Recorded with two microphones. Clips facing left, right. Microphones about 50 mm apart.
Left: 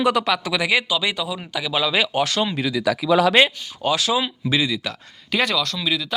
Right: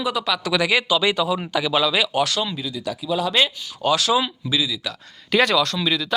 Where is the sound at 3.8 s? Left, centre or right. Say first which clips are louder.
Right 2 dB; centre.